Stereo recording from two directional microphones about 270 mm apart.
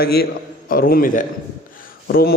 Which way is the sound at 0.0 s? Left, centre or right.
Left.